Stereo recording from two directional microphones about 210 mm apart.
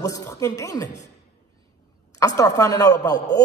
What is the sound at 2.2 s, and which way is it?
A man's voice, 15° left (ahead or behind).